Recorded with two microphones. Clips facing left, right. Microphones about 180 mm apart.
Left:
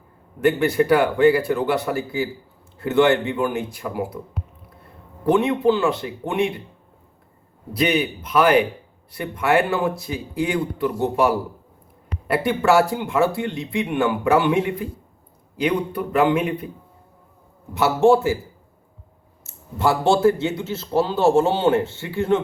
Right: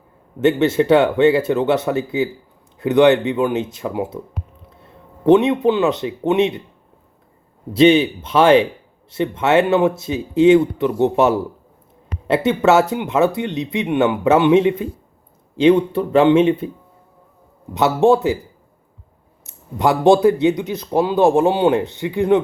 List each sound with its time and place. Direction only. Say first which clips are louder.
0.4 s speech: right 3 dB; 25° right (ahead or behind)
7.7 s speech: right 9 dB; 25° right (ahead or behind)
17.7 s speech: right 2 dB; 20° right (ahead or behind)
19.5 s a man's voice: right 3 dB; 20° right (ahead or behind)